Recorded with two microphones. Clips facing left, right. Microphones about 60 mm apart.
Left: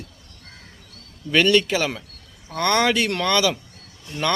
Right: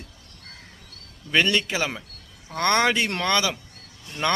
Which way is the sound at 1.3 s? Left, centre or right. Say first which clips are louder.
Left 4 dB; centre.